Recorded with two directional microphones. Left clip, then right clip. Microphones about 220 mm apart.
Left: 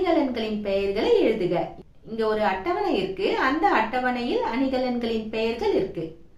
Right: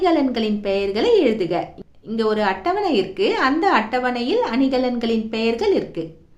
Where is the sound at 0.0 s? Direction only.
50° right (ahead or behind).